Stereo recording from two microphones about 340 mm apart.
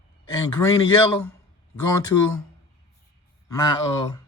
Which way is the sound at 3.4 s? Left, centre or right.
Centre.